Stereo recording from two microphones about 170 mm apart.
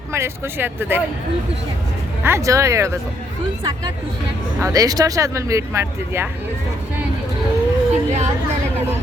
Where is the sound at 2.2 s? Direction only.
15° right (ahead or behind).